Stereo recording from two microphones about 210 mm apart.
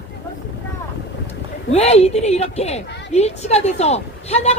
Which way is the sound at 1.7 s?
30° left (ahead or behind).